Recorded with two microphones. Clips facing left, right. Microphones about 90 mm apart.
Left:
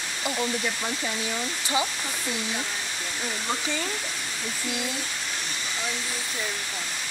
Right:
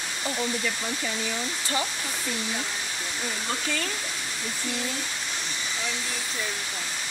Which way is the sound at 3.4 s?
15° left (ahead or behind).